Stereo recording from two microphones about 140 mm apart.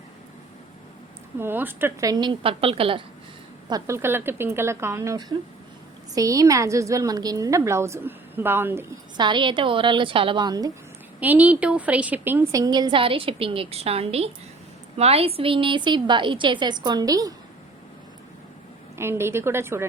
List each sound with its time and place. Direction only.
1.4 s a woman's voice: 15° right (ahead or behind); by 3.0 s 40° right (ahead or behind)
3.7 s a woman's voice: 25° right (ahead or behind)
9.1 s a woman's voice: 35° right (ahead or behind)
11.2 s a woman's voice: 10° right (ahead or behind)
18.9 s a woman's voice: 20° right (ahead or behind)